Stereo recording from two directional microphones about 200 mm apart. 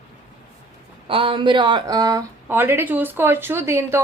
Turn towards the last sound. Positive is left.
turn(degrees=-15)  # may be behind; listen again after turning